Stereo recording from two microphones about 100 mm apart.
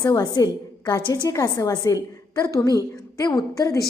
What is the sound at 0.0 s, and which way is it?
A woman's voice, 40° left (ahead or behind).